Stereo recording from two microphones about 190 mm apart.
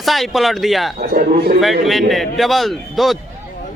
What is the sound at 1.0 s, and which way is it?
Speech, 45° right (ahead or behind).